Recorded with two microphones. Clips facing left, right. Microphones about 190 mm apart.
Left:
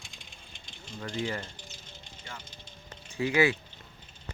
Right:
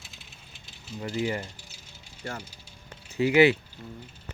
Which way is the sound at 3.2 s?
25° right (ahead or behind).